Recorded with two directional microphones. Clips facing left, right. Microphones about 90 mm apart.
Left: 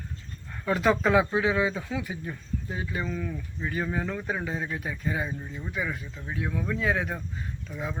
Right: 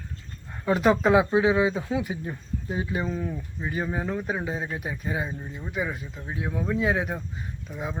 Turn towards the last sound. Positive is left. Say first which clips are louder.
# right 1 dB
turn(degrees=-15)  # may be behind; listen again after turning